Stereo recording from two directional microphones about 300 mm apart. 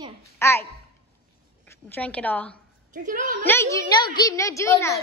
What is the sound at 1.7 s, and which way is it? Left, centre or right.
Speech, centre.